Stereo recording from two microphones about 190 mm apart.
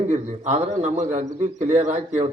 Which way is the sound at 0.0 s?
35° right (ahead or behind).